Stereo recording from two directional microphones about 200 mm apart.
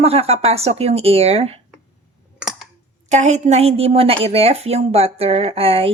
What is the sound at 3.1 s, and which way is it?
A woman's voice, 35° right (ahead or behind).